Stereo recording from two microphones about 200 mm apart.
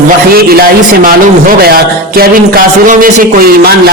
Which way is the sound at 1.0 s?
45° right (ahead or behind).